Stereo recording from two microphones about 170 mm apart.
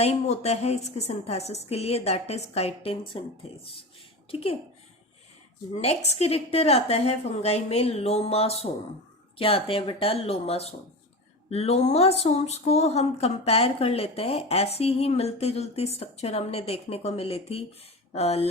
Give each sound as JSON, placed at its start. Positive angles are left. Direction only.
{"t": 0.0, "sound": "speech", "side_deg": 40}
{"t": 5.7, "sound": "speech", "side_deg": 40}